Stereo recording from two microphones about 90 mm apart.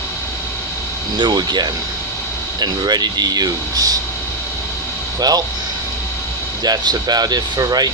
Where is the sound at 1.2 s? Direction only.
55° right (ahead or behind).